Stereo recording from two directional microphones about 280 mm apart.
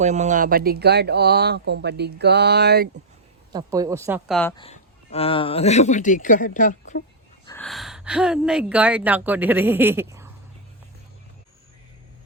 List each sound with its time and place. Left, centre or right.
0.0 s speech: right
3.5 s speech: centre
4.4 s speech: centre
4.6 s speech: centre
7.4 s a woman's voice: centre